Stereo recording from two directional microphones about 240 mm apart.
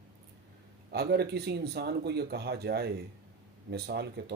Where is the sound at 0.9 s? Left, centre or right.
Right.